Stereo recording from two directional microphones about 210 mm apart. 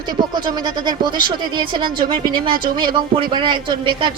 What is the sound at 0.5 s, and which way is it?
Speech, 20° right (ahead or behind).